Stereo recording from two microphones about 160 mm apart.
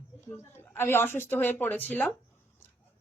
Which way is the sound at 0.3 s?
15° left (ahead or behind).